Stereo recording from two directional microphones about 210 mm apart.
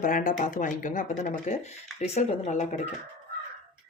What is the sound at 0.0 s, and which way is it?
Speech, 40° left (ahead or behind).